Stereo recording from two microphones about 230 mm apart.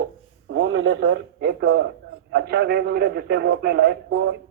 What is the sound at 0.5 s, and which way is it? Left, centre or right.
A man's voice, right.